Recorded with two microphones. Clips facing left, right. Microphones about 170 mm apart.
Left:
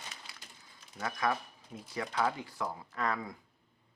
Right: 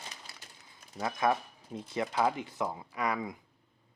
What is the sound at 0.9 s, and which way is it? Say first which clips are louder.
Speech: right 4 dB; 25° right (ahead or behind).